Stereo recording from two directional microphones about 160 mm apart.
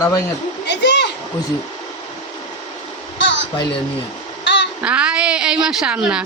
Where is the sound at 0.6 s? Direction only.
90° left.